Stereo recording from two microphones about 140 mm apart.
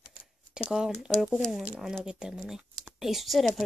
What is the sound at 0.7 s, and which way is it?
Speech, 5° right (ahead or behind).